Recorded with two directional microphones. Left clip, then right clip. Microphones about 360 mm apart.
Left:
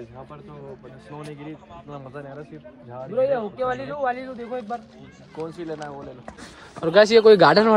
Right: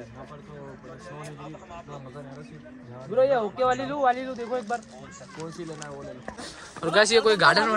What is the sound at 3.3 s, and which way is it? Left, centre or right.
Speech, centre.